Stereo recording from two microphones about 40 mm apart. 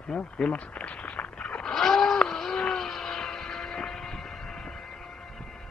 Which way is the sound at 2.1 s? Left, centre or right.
Centre.